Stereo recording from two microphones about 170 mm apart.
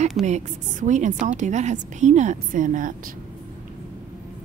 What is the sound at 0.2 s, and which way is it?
A woman's voice, 45° right (ahead or behind).